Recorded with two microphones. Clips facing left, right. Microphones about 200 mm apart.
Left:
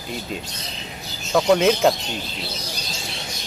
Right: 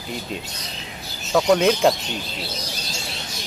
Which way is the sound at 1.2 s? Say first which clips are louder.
Even; centre (ahead or behind).